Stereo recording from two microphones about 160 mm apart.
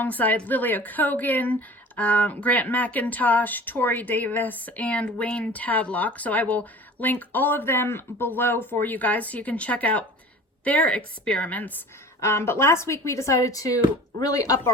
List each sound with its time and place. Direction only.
0.0 s speech: 10° left (ahead or behind)